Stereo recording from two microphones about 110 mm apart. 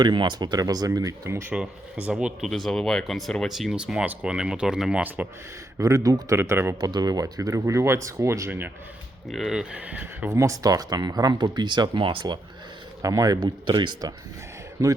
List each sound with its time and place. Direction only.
0.0 s speech: 45° right (ahead or behind); by 1.5 s 25° right (ahead or behind)
1.5 s speech: 10° right (ahead or behind)
5.7 s speech: 30° right (ahead or behind)
6.3 s speech: 20° right (ahead or behind)
6.7 s speech: 40° right (ahead or behind); by 8.7 s 20° right (ahead or behind)
9.3 s speech: centre (ahead or behind)
10.3 s speech: 30° right (ahead or behind); by 12.4 s 45° right (ahead or behind)
13.0 s speech: 30° right (ahead or behind)
13.7 s speech: 45° right (ahead or behind)